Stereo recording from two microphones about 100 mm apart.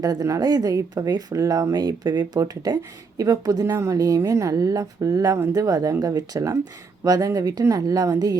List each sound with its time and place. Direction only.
0.0 s speech: 35° right (ahead or behind)